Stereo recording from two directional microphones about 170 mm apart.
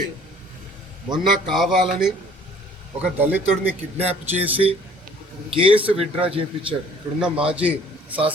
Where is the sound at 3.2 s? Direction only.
10° right (ahead or behind).